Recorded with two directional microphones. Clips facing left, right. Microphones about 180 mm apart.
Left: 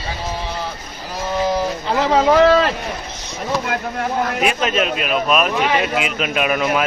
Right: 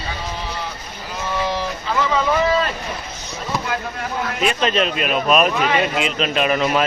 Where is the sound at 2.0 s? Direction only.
70° left (ahead or behind).